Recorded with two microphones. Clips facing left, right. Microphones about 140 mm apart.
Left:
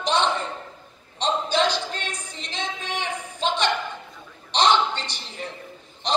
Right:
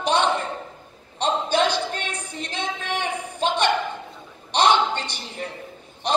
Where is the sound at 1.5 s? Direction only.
55° right (ahead or behind).